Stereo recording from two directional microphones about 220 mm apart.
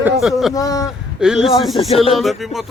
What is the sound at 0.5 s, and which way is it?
Speech, 15° left (ahead or behind).